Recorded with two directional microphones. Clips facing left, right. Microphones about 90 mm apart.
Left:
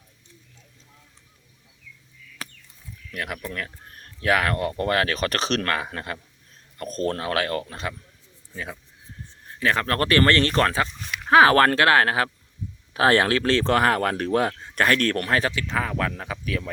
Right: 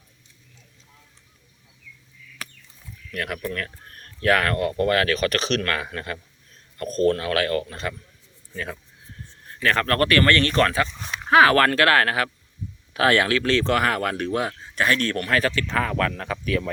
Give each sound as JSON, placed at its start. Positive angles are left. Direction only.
{"t": 2.4, "sound": "a sound", "side_deg": 30}
{"t": 3.1, "sound": "speech", "side_deg": 15}
{"t": 15.3, "sound": "speech", "side_deg": 20}
{"t": 15.7, "sound": "speech", "side_deg": 5}